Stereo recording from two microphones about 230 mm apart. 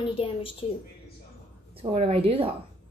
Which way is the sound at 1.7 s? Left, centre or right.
Right.